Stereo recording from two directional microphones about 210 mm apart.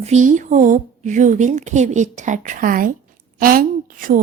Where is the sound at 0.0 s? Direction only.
35° right (ahead or behind).